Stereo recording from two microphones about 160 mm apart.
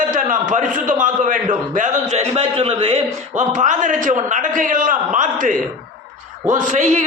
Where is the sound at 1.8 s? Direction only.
40° right (ahead or behind).